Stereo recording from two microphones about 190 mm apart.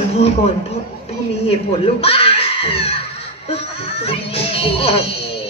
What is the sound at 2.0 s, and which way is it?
Screaming, 30° left (ahead or behind).